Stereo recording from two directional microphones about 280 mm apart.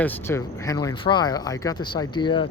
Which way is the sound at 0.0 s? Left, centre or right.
Centre.